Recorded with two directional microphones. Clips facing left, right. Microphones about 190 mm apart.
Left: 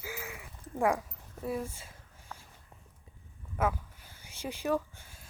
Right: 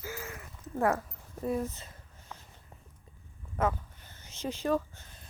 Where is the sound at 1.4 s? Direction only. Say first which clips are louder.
Right 3 dB; 10° left (ahead or behind).